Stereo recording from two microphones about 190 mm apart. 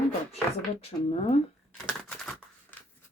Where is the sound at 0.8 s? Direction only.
30° left (ahead or behind).